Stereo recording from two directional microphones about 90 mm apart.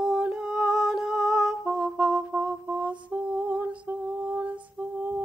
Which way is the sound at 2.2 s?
15° right (ahead or behind).